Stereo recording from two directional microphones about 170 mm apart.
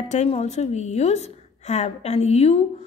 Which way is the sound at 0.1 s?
40° left (ahead or behind).